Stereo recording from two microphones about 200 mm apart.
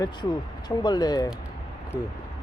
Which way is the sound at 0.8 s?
20° left (ahead or behind).